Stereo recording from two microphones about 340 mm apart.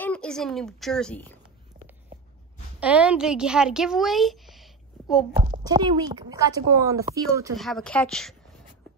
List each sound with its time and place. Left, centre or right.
0.0 s a woman's voice: centre
2.8 s a woman's voice: centre
5.3 s a child's voice: right
5.6 s a woman's voice: centre